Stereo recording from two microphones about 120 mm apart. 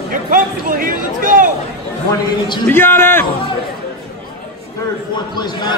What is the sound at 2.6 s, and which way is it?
Speech, 15° left (ahead or behind).